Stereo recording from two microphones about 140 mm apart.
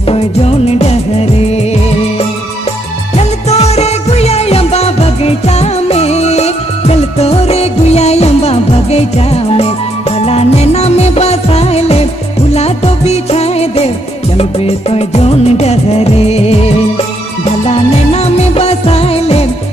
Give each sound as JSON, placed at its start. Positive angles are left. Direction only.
{"t": 0.0, "sound": "music of bollywood", "side_deg": 45}
{"t": 1.6, "sound": "music", "side_deg": 50}
{"t": 12.5, "sound": "music of bollywood", "side_deg": 50}
{"t": 17.5, "sound": "music", "side_deg": 50}